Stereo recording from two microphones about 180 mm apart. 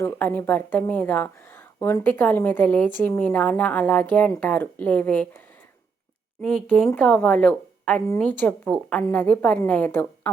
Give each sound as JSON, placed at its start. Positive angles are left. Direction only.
{"t": 0.0, "sound": "a woman's voice", "side_deg": 10}
{"t": 6.4, "sound": "a woman's voice", "side_deg": 5}